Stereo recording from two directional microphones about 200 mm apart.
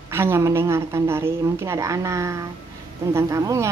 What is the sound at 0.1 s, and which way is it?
Speech, 10° right (ahead or behind).